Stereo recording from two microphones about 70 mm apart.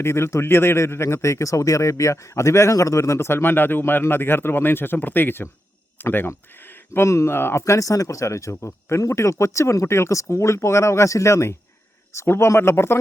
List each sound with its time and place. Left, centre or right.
0.0 s speech: left
7.6 s speech: left